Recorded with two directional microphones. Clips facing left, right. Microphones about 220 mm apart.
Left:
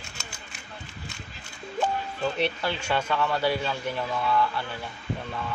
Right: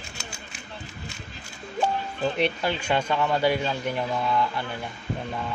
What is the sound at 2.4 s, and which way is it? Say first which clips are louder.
Speech: right 2 dB; 15° right (ahead or behind).